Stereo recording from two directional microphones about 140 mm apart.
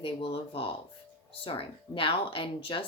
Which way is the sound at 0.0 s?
40° left (ahead or behind).